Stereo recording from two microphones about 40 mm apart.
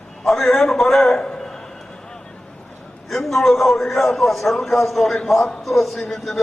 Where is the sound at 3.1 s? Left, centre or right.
Centre.